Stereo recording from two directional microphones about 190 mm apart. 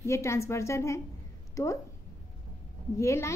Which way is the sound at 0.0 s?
15° left (ahead or behind).